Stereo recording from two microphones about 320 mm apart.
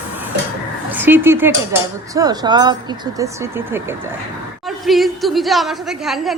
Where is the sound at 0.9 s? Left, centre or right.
Centre.